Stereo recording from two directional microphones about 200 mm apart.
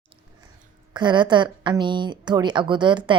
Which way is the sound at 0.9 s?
20° right (ahead or behind).